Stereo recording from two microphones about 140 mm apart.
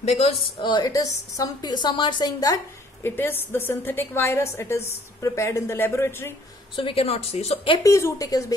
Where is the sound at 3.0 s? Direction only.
15° left (ahead or behind).